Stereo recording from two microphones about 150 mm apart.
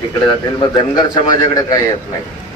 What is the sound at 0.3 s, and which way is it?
A man's voice, 30° left (ahead or behind).